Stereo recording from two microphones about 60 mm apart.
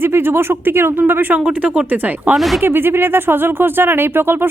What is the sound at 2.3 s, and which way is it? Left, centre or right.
Speech, centre.